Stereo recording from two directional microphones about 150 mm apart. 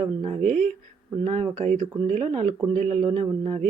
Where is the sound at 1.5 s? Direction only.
45° right (ahead or behind).